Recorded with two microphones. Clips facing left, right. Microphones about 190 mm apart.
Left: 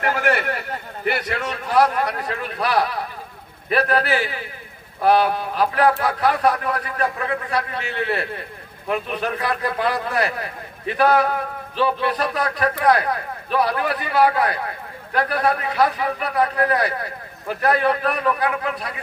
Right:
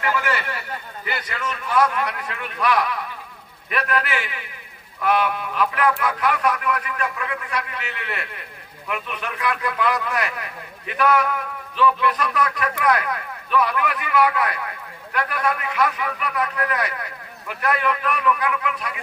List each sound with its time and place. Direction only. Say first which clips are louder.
0.2 s a man's voice: left 5 dB; 55° left (ahead or behind)
1.4 s a man's voice: left 2 dB; 35° left (ahead or behind)